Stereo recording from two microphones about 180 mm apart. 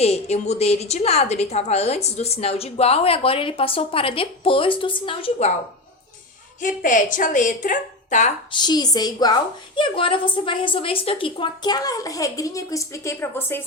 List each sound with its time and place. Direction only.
0.0 s a woman's voice: 35° left (ahead or behind)
6.6 s a woman's voice: 45° left (ahead or behind)
8.5 s a woman's voice: 25° left (ahead or behind)